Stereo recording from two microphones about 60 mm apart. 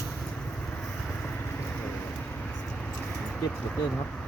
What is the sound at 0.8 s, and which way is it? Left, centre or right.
Vehicle, left.